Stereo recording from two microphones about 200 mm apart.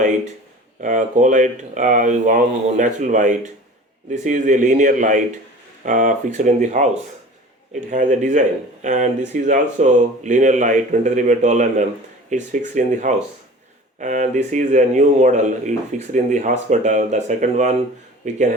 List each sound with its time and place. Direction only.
0.8 s speech: 40° right (ahead or behind)